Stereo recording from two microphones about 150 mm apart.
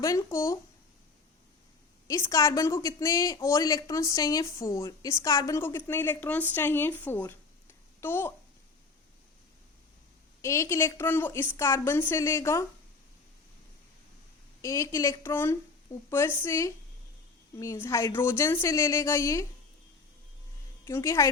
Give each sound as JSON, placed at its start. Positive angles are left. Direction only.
{"t": 0.0, "sound": "a woman's voice", "side_deg": 20}
{"t": 2.0, "sound": "a woman's voice", "side_deg": 20}
{"t": 10.4, "sound": "a woman's voice", "side_deg": 20}
{"t": 14.6, "sound": "a woman's voice", "side_deg": 20}
{"t": 20.8, "sound": "a woman's voice", "side_deg": 20}